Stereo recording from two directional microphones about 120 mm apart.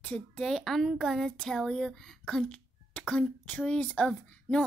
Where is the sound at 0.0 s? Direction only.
10° left (ahead or behind).